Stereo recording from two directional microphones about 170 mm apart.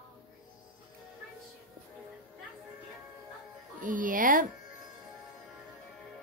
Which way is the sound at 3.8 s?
50° right (ahead or behind).